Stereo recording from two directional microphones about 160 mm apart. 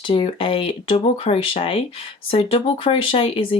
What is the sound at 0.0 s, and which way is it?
Speech, 35° left (ahead or behind).